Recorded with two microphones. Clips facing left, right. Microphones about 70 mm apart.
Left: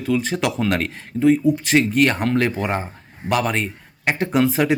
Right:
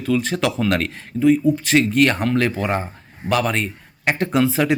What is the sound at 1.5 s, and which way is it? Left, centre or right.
Speech, centre.